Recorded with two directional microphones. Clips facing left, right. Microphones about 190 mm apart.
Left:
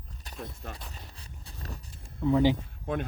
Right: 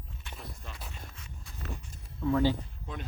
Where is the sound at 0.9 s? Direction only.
35° left (ahead or behind).